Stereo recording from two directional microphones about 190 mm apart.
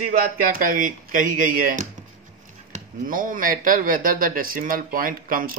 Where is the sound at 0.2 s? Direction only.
50° right (ahead or behind).